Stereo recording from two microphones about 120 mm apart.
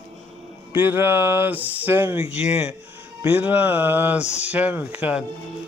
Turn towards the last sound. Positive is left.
turn(degrees=-10)  # may be behind; listen again after turning